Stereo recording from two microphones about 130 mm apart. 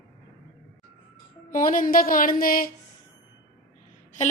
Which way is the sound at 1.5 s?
90° left.